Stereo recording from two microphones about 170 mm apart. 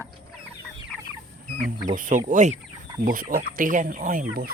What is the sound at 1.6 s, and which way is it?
Speech, 50° right (ahead or behind).